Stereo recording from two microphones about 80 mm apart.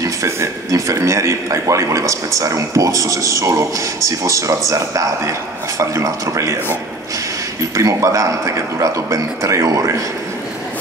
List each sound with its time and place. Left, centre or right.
0.0 s speech: right
7.7 s speech: right